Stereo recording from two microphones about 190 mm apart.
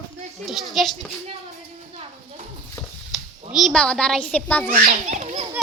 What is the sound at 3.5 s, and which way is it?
A woman's voice, centre (ahead or behind).